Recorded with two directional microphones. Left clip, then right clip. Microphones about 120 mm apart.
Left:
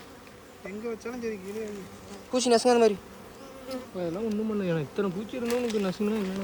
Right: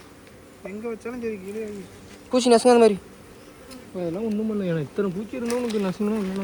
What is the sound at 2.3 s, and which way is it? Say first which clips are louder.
Speech: right 6 dB; 15° left (ahead or behind).